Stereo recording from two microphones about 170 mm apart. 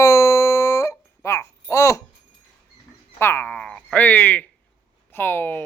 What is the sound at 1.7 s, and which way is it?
Babbling, 15° left (ahead or behind).